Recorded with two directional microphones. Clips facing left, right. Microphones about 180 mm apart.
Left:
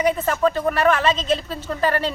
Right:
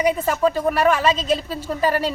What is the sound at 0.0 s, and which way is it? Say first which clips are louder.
Speech: even; 10° right (ahead or behind).